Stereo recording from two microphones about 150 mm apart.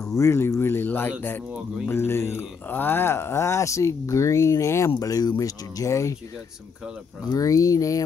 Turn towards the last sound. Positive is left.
turn(degrees=20)  # may be behind; listen again after turning